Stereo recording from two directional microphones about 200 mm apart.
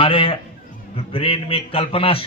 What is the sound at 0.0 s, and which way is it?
A man's voice, 25° left (ahead or behind).